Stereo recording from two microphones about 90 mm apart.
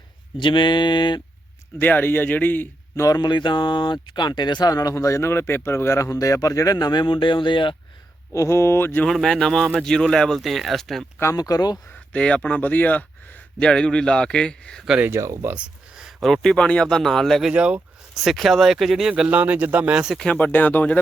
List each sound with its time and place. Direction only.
0.3 s a sound: 65° left (ahead or behind)
1.8 s speech: 20° left (ahead or behind)
2.9 s speech: 35° left (ahead or behind)
3.2 s speech: 55° left (ahead or behind)
8.3 s speech: 35° left (ahead or behind)
9.0 s speech: 5° left (ahead or behind)
11.3 s speech: 45° left (ahead or behind)
12.1 s speech: 15° left (ahead or behind)
15.0 s speech: 35° right (ahead or behind)
15.4 s speech: 15° right (ahead or behind); by 17.5 s 5° left (ahead or behind)
17.5 s speech: 10° right (ahead or behind)
18.1 s speech: centre (ahead or behind)
20.1 s speech: 15° left (ahead or behind)